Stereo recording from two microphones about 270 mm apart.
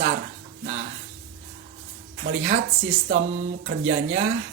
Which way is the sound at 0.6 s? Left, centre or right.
Right.